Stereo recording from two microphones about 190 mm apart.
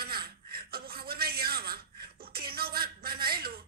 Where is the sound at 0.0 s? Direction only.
55° right (ahead or behind).